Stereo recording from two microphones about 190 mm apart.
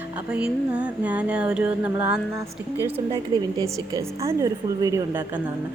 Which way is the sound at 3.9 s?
15° right (ahead or behind).